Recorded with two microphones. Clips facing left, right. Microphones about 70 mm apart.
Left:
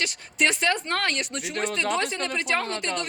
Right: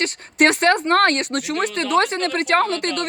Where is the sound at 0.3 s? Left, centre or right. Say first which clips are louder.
Right 8 dB; right.